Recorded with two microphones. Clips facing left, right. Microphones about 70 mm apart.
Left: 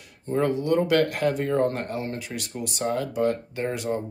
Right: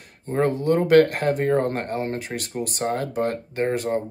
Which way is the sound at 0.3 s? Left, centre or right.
Right.